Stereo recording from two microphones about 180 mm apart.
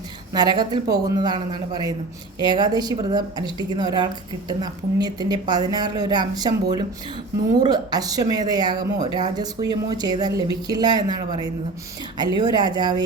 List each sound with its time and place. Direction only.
0.3 s a woman's voice: 25° right (ahead or behind)